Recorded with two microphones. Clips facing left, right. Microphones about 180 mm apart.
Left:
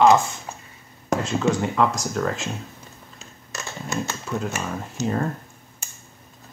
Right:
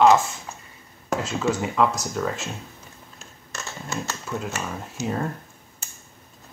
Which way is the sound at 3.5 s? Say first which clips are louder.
Left 3 dB; 15° left (ahead or behind).